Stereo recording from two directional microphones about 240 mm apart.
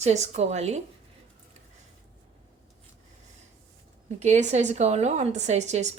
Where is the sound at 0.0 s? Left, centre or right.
Right.